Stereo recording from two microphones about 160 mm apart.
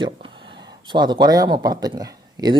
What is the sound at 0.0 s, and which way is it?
Speech, 30° right (ahead or behind).